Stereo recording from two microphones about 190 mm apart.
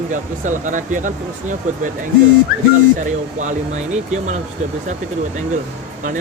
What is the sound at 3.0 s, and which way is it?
Speech, 40° right (ahead or behind).